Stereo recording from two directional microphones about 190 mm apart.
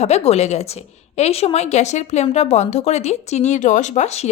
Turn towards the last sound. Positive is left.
turn(degrees=35)  # may be behind; listen again after turning